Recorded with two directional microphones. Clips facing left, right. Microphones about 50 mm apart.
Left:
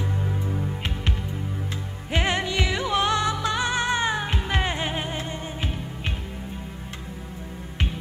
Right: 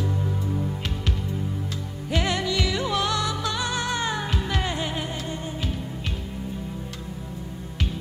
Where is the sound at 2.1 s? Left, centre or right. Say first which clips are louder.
Even; left.